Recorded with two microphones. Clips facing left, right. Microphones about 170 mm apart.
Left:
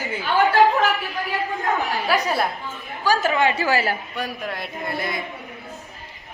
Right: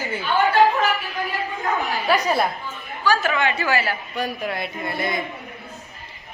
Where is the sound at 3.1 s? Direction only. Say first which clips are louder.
Left 1 dB; 35° left (ahead or behind).